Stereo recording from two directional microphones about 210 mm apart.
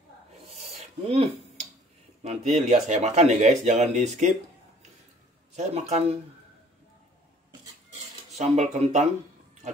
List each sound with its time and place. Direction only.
0.7 s a sound: 30° right (ahead or behind)
2.2 s speech: 30° right (ahead or behind)
5.6 s speech: 30° right (ahead or behind)
8.4 s speech: 35° right (ahead or behind)